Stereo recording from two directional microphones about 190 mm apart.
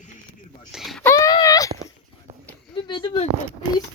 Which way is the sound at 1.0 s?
15° left (ahead or behind).